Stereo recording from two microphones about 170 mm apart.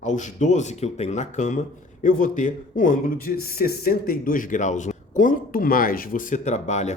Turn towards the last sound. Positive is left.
turn(degrees=45)  # may be behind; listen again after turning